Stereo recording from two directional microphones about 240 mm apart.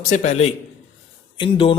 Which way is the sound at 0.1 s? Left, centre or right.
Left.